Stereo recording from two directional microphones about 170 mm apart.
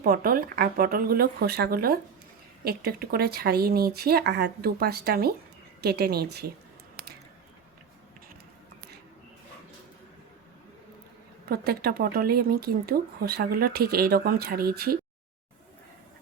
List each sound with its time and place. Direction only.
0.0 s speech: 60° right (ahead or behind)
11.4 s speech: 65° right (ahead or behind)